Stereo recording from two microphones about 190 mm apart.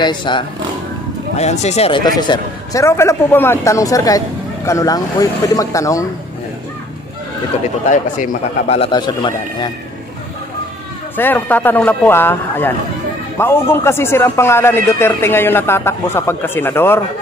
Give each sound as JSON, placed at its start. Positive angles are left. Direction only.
{"t": 0.0, "sound": "a man's voice", "side_deg": 25}
{"t": 1.3, "sound": "a man's voice", "side_deg": 35}
{"t": 7.9, "sound": "a man's voice", "side_deg": 40}
{"t": 11.1, "sound": "a man's voice", "side_deg": 10}